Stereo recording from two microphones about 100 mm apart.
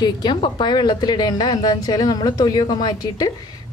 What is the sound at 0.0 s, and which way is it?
A woman's voice, 50° left (ahead or behind).